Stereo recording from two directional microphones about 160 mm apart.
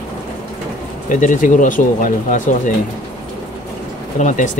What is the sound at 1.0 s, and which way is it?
Speech, 55° left (ahead or behind).